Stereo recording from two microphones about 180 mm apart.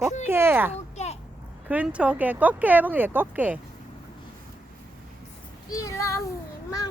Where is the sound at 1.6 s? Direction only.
10° right (ahead or behind).